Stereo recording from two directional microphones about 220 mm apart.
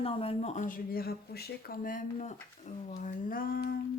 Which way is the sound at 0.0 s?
25° left (ahead or behind).